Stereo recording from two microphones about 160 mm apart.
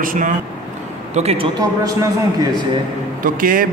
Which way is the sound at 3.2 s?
60° right (ahead or behind).